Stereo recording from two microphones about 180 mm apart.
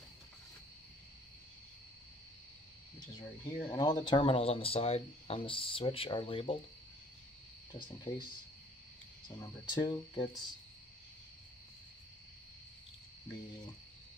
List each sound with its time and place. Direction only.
3.2 s speech: 20° left (ahead or behind)
8.1 s speech: 30° left (ahead or behind)
9.3 s speech: 25° left (ahead or behind)